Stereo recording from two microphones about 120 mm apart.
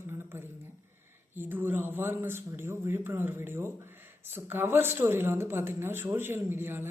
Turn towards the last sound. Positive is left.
turn(degrees=-20)  # may be behind; listen again after turning